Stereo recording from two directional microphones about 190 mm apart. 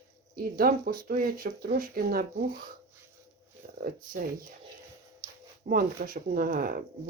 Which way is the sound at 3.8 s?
45° right (ahead or behind).